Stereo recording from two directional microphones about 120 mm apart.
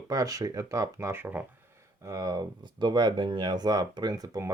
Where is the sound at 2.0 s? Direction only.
30° right (ahead or behind).